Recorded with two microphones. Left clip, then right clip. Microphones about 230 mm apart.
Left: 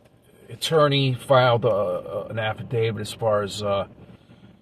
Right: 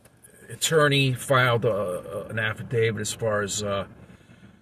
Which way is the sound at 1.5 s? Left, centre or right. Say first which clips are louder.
Left 4 dB; centre.